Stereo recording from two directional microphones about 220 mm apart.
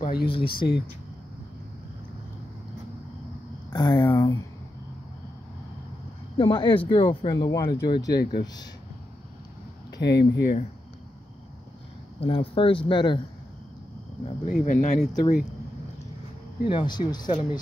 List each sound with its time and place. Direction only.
0.0 s a sound: 45° left (ahead or behind)
0.3 s speech: 25° left (ahead or behind)
3.7 s speech: 20° left (ahead or behind)
6.3 s speech: 20° left (ahead or behind)
8.1 s speech: 45° left (ahead or behind)
9.9 s speech: 50° left (ahead or behind)
12.2 s speech: 25° left (ahead or behind)
14.5 s speech: 35° left (ahead or behind)
16.6 s speech: 20° left (ahead or behind)